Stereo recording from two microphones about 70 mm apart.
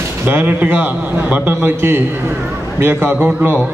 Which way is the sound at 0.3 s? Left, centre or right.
Right.